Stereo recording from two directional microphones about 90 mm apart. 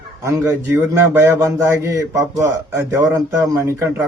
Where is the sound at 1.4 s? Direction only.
35° right (ahead or behind).